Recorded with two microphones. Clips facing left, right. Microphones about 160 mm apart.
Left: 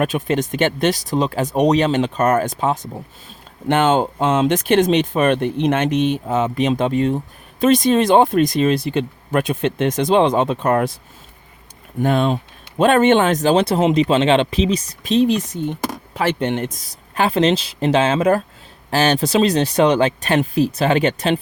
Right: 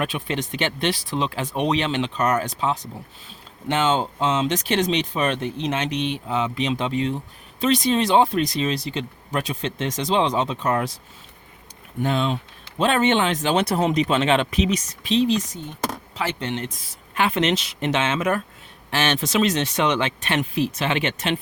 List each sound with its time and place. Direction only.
0.0 s speech: 45° left (ahead or behind)
12.0 s speech: 50° left (ahead or behind); by 15.1 s 35° left (ahead or behind)
15.1 s speech: 55° left (ahead or behind); by 21.4 s 35° left (ahead or behind)